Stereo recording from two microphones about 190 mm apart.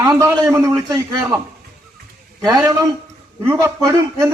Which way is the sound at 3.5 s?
15° right (ahead or behind).